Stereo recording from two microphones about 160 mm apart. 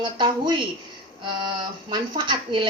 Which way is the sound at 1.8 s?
30° right (ahead or behind).